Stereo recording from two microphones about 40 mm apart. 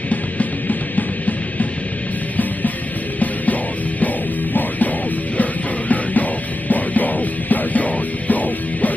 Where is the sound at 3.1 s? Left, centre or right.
Left.